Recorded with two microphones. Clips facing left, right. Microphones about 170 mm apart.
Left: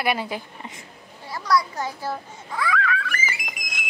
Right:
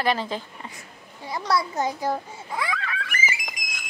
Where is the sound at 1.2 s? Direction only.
20° right (ahead or behind).